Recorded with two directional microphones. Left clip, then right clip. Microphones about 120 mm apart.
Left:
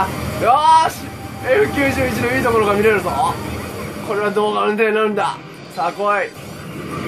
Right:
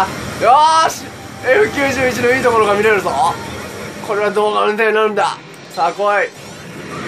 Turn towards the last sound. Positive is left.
turn(degrees=-40)  # may be behind; listen again after turning